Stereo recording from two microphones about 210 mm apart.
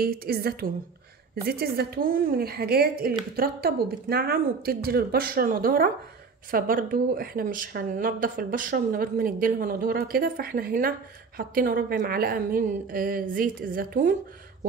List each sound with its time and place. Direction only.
0.0 s speech: 45° right (ahead or behind)